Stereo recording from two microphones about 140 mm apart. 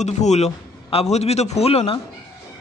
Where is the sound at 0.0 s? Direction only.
55° left (ahead or behind).